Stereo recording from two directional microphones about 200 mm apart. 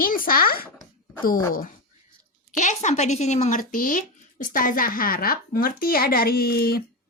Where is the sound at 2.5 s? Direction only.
35° left (ahead or behind).